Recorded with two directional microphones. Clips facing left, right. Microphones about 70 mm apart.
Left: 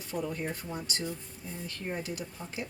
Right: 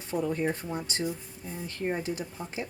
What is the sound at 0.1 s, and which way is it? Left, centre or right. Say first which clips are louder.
Speech: right 6 dB; right.